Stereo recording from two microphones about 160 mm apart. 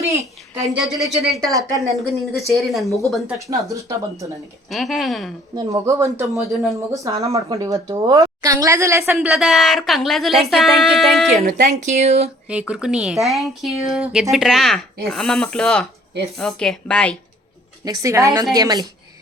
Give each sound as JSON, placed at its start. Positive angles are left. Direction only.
{"t": 0.0, "sound": "a sound", "side_deg": -20}
{"t": 0.8, "sound": "speech", "side_deg": 0}
{"t": 3.3, "sound": "a woman's voice", "side_deg": -20}
{"t": 4.7, "sound": "speech", "side_deg": 0}
{"t": 5.5, "sound": "a woman's voice", "side_deg": -20}
{"t": 9.1, "sound": "speech", "side_deg": -5}
{"t": 11.4, "sound": "speech", "side_deg": -55}
{"t": 12.5, "sound": "speech", "side_deg": -5}
{"t": 17.8, "sound": "a woman's voice", "side_deg": -20}